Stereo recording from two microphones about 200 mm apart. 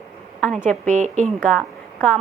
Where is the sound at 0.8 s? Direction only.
35° right (ahead or behind).